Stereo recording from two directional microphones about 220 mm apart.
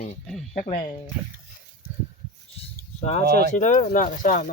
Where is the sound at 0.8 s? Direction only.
20° left (ahead or behind).